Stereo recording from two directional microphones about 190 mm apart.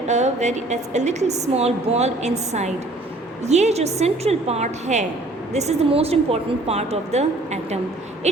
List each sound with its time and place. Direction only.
0.1 s a woman's voice: 35° right (ahead or behind)